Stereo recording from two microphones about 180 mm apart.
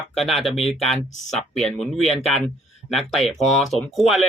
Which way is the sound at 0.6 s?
35° left (ahead or behind).